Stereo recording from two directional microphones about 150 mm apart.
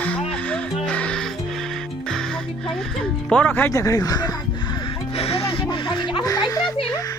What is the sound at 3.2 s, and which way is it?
Speech, 10° left (ahead or behind).